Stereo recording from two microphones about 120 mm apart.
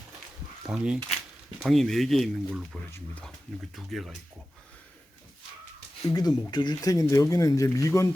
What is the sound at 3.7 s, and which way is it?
Speech, centre (ahead or behind).